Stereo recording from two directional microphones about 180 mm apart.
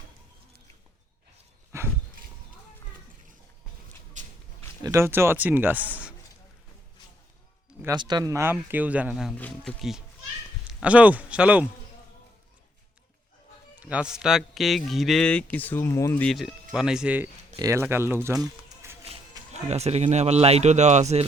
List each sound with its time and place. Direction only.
4.2 s a sound: 45° right (ahead or behind)
4.8 s speech: 15° right (ahead or behind)
5.9 s a sound: 5° right (ahead or behind)
7.9 s a man's voice: 25° right (ahead or behind); by 11.6 s 5° right (ahead or behind)
13.7 s a man's voice: 5° right (ahead or behind); by 16.2 s 15° left (ahead or behind)
16.2 s a man's voice: centre (ahead or behind); by 18.9 s 15° right (ahead or behind)
19.6 s speech: 35° right (ahead or behind)